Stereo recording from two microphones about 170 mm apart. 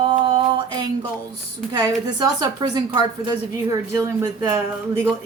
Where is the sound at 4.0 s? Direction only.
20° right (ahead or behind).